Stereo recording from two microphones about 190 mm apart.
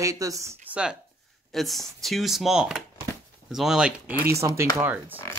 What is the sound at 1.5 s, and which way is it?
Speech, centre (ahead or behind).